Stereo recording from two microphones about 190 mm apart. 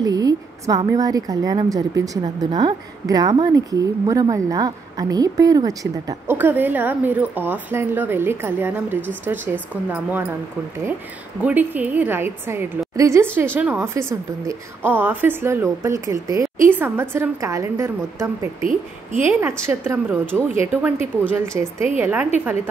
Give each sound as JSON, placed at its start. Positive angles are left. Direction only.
{"t": 0.0, "sound": "a sound", "side_deg": -20}
{"t": 0.8, "sound": "speech", "side_deg": -20}
{"t": 11.4, "sound": "speech", "side_deg": -10}